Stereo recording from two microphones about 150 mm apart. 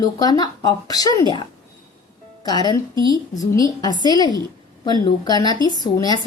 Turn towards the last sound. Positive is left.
turn(degrees=25)  # may be behind; listen again after turning